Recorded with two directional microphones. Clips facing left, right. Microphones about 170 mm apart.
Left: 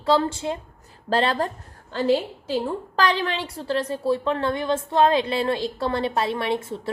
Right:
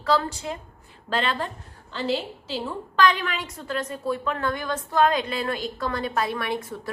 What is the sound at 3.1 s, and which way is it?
A woman's voice, 30° left (ahead or behind).